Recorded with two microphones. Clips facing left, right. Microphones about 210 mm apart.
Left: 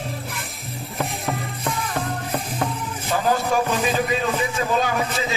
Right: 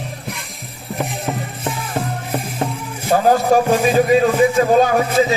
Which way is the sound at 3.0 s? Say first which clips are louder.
Right 8 dB; 45° right (ahead or behind).